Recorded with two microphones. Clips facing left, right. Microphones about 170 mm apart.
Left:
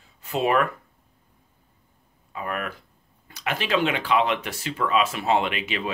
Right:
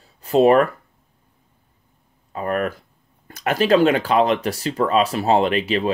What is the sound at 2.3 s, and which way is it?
Speech, 40° right (ahead or behind).